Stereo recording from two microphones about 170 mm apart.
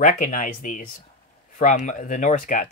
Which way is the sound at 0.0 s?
50° left (ahead or behind).